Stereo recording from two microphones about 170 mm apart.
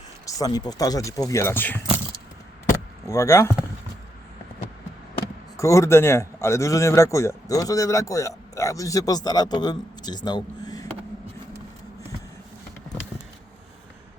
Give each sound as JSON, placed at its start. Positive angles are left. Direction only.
{"t": 0.3, "sound": "speech", "side_deg": 20}
{"t": 3.1, "sound": "speech", "side_deg": 15}
{"t": 5.5, "sound": "a man's voice", "side_deg": 20}